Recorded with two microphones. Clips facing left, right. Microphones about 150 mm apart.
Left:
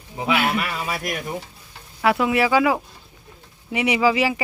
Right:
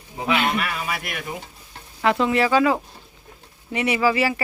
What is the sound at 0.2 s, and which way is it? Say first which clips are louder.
Speech: left 1 dB; 5° left (ahead or behind).